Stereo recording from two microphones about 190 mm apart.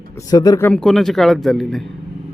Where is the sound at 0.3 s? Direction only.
20° left (ahead or behind).